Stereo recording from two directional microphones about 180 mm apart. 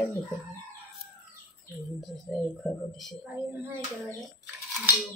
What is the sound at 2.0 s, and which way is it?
Speech, 5° left (ahead or behind).